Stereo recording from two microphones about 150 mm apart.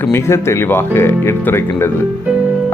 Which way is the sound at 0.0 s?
15° left (ahead or behind).